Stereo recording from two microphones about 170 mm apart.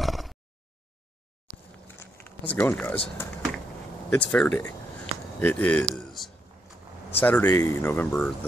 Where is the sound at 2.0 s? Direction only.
10° left (ahead or behind).